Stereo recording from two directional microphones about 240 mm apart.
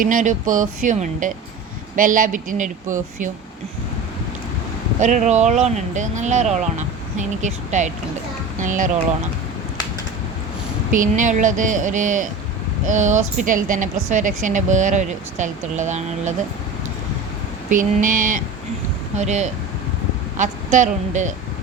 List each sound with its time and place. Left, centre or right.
0.0 s speech: right
4.9 s speech: right
10.9 s speech: right
17.7 s speech: right